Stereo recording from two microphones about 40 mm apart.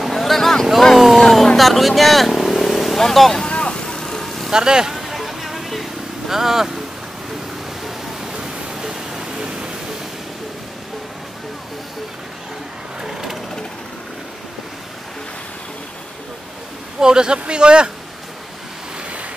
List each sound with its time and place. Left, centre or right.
0.1 s vehicle: centre
0.9 s a sound: centre
1.2 s a sound: centre
1.6 s vehicle: centre
3.4 s vehicle: left; by 4.5 s centre
4.5 s speech: centre
4.9 s vehicle: centre
6.3 s speech: centre
8.3 s pink noise: centre
13.0 s sewing machine: centre
17.0 s a man's voice: centre